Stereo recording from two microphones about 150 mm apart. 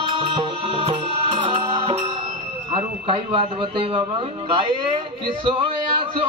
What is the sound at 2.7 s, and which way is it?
A man's voice, 35° right (ahead or behind).